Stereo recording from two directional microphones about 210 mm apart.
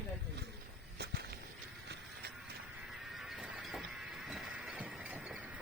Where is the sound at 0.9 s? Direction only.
50° right (ahead or behind).